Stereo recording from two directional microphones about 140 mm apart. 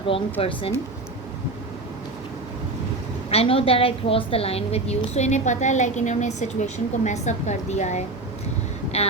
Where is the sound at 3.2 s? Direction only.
45° left (ahead or behind).